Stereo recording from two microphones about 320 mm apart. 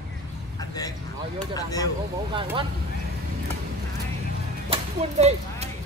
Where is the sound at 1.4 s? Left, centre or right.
Centre.